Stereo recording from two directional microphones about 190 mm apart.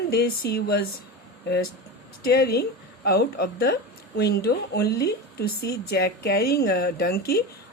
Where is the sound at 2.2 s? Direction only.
55° left (ahead or behind).